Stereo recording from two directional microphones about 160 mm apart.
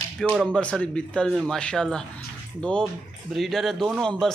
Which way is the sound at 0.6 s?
5° left (ahead or behind).